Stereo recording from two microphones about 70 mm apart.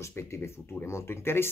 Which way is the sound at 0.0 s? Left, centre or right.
Left.